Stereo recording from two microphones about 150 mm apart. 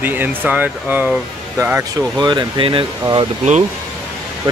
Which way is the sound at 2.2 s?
30° right (ahead or behind).